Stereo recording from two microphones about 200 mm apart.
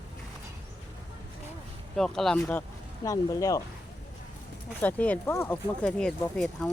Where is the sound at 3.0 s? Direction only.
15° left (ahead or behind).